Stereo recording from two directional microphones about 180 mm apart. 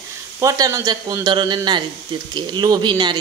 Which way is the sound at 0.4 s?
20° right (ahead or behind).